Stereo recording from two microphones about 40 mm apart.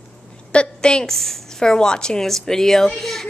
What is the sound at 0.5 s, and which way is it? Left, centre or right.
Speech, left.